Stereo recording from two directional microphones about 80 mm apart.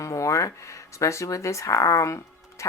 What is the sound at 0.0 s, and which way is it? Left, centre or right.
Speech, left.